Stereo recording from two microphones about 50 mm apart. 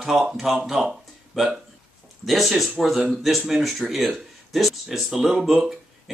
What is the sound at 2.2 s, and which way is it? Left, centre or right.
Speech, centre.